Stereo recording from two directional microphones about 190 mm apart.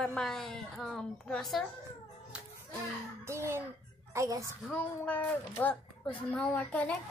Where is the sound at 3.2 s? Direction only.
15° right (ahead or behind).